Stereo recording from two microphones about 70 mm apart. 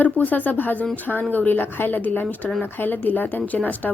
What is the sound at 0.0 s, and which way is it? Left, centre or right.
A woman's voice, left.